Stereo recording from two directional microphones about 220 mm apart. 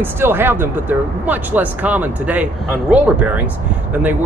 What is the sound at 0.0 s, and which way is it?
Speech, 10° right (ahead or behind).